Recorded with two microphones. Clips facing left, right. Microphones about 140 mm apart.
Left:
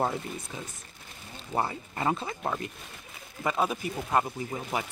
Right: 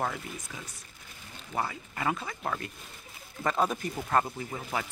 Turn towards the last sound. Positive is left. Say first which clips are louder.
# left 2 dB
turn(degrees=20)  # may be behind; listen again after turning